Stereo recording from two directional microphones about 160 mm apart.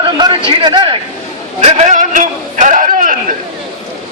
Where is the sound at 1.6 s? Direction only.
45° right (ahead or behind).